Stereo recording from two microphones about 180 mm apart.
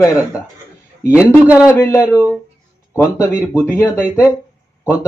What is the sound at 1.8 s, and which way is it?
Speech, 15° left (ahead or behind).